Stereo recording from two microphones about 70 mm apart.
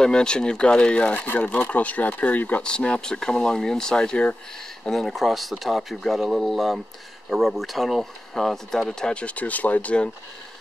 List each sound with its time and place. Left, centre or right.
0.0 s speech: centre
4.8 s speech: centre
9.1 s speech: centre